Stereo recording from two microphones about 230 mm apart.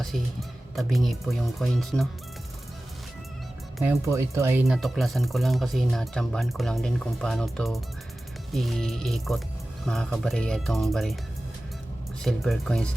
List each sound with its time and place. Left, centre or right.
0.8 s speech: centre
3.8 s speech: centre
4.6 s speech: centre
12.2 s speech: centre